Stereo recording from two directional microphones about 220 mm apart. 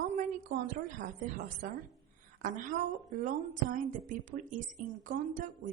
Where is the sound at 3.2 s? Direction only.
35° right (ahead or behind).